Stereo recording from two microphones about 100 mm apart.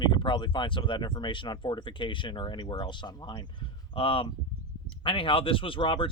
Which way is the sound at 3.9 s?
65° left (ahead or behind).